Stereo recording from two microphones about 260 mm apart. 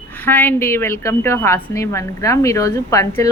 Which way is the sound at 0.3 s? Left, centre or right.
Centre.